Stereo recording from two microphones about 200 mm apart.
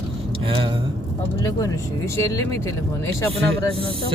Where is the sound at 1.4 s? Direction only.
20° left (ahead or behind).